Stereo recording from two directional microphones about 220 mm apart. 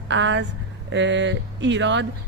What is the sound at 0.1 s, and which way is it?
Speech, 55° right (ahead or behind).